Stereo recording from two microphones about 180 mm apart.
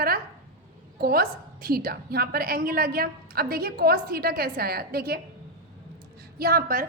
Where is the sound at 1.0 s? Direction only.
55° right (ahead or behind).